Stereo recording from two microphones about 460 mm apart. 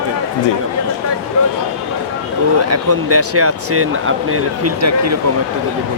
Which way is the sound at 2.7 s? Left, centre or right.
Right.